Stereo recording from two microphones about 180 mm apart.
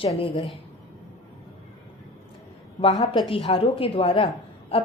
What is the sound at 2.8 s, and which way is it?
A woman's voice, 25° left (ahead or behind).